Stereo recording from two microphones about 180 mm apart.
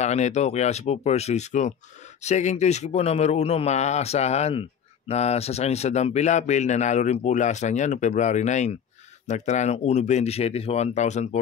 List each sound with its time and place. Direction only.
0.0 s a man's voice: 40° left (ahead or behind)